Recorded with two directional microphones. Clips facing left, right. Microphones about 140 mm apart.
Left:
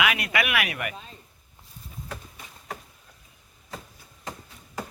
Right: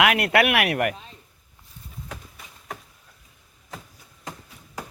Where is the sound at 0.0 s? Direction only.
70° right (ahead or behind).